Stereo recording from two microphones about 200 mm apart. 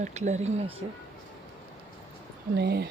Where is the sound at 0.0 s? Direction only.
35° right (ahead or behind).